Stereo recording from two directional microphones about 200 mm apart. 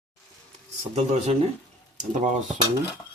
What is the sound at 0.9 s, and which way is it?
Speech, 35° right (ahead or behind).